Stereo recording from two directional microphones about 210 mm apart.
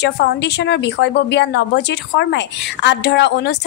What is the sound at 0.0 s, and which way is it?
A woman's voice, 55° left (ahead or behind).